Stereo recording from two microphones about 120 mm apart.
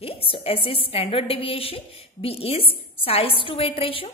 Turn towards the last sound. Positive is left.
turn(degrees=50)  # may be behind; listen again after turning